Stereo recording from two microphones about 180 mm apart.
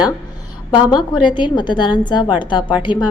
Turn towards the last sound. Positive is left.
turn(degrees=25)  # may be behind; listen again after turning